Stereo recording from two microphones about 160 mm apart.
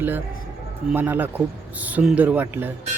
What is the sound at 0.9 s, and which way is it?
Speech, 10° right (ahead or behind).